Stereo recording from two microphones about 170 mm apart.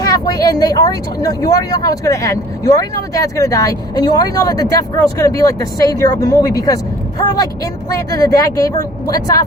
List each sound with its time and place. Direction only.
0.0 s speech: 20° left (ahead or behind)